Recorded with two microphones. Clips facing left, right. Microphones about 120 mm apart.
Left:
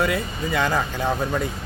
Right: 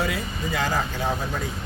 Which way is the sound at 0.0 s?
60° left (ahead or behind).